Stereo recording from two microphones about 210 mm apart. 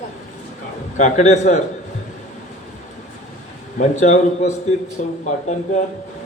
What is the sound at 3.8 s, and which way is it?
A man's voice, 35° left (ahead or behind).